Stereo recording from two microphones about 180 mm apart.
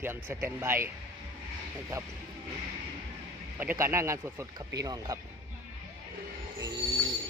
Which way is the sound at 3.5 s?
10° right (ahead or behind).